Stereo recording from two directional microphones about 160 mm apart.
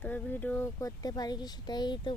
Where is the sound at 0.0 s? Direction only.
10° left (ahead or behind).